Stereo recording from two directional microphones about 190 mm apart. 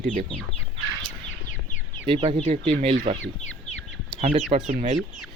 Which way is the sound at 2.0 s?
30° right (ahead or behind).